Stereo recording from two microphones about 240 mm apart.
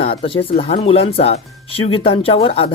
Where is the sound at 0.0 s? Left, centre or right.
Left.